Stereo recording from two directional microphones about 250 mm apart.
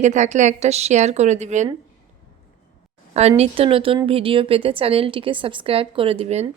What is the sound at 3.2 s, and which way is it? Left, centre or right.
A woman's voice, right.